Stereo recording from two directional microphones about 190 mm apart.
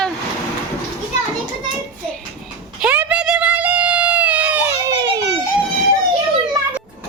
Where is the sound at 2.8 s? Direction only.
10° right (ahead or behind).